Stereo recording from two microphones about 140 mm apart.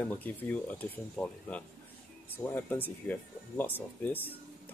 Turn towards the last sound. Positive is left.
turn(degrees=15)  # may be behind; listen again after turning